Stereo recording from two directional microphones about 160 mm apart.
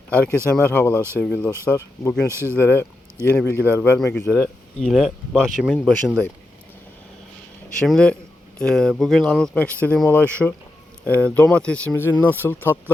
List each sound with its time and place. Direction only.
0.1 s speech: 10° left (ahead or behind)
2.3 s speech: 15° right (ahead or behind)
2.6 s speech: 15° left (ahead or behind)
4.8 s a man's voice: centre (ahead or behind)
7.8 s a man's voice: 5° left (ahead or behind)